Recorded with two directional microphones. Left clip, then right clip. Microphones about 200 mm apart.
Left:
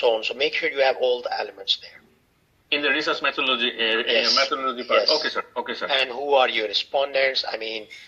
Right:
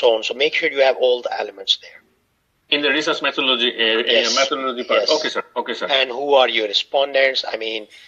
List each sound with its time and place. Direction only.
0.0 s speech: 40° right (ahead or behind)